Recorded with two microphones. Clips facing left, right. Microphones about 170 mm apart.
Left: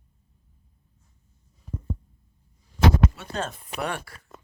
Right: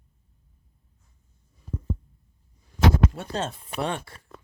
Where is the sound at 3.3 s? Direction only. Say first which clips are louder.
Right 1 dB; 30° right (ahead or behind).